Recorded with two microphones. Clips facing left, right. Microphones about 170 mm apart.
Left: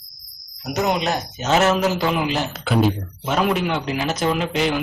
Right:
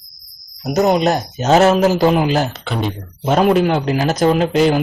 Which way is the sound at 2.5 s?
5° left (ahead or behind).